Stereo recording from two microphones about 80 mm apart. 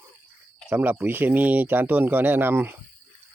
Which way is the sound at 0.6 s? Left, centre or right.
Right.